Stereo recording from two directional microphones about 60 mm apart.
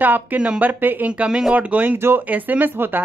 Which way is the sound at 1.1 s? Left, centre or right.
Centre.